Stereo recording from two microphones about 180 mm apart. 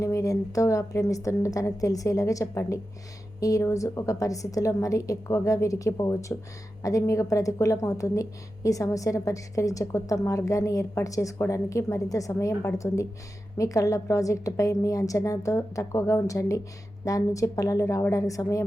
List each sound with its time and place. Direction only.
0.0 s a woman's voice: 15° left (ahead or behind)